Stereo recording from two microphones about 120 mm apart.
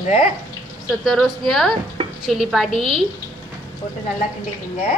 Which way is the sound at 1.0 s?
Centre (ahead or behind).